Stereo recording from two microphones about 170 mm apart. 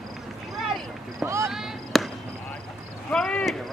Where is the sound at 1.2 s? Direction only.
15° right (ahead or behind).